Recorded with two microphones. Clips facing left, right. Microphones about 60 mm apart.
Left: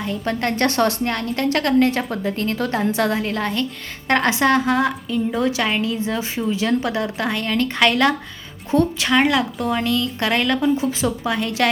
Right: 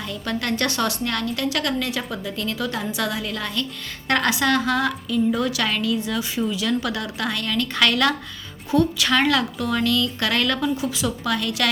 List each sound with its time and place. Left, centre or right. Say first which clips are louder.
0.0 s a woman's voice: left 4 dB; left
9.0 s a woman's voice: left 2 dB; left